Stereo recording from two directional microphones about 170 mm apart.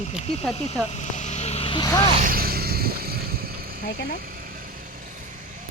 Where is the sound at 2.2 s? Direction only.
60° right (ahead or behind).